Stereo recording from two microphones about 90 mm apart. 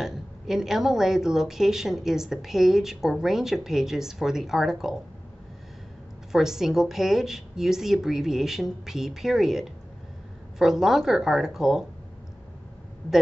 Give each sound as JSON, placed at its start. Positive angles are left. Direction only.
{"t": 0.0, "sound": "a woman's voice", "side_deg": -5}
{"t": 6.3, "sound": "a woman's voice", "side_deg": -5}